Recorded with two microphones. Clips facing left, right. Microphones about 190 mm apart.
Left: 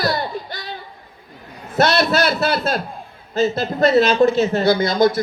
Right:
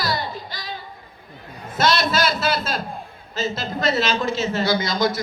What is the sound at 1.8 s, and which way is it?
A woman's voice, 60° left (ahead or behind).